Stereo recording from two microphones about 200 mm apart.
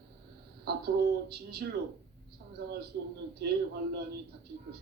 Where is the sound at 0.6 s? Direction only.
55° right (ahead or behind).